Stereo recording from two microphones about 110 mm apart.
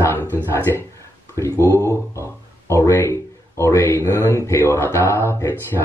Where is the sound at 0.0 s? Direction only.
20° left (ahead or behind).